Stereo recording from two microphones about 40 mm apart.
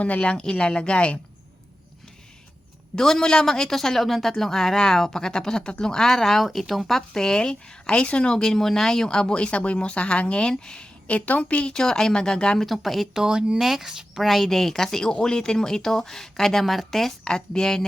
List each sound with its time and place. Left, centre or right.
0.2 s speech: left
2.9 s a woman's voice: centre
11.1 s a woman's voice: left
11.7 s a woman's voice: centre
12.5 s speech: centre
13.1 s a woman's voice: centre
17.2 s a woman's voice: centre